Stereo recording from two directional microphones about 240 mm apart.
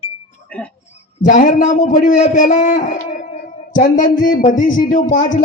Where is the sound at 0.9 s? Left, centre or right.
Left.